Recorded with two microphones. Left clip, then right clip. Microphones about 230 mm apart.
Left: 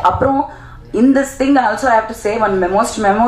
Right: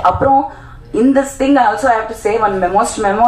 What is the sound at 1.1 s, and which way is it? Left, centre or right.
A woman's voice, left.